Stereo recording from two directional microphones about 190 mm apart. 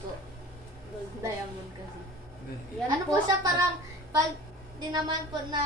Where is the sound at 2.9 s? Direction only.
20° right (ahead or behind).